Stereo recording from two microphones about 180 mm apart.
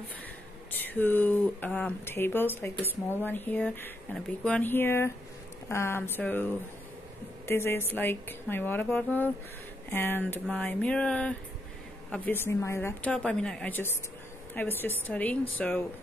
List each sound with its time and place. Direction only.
0.7 s speech: 10° left (ahead or behind)
10.4 s a sound: 5° left (ahead or behind)
12.1 s speech: 10° left (ahead or behind)